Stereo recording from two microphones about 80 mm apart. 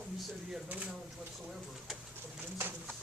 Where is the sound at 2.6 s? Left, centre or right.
Right.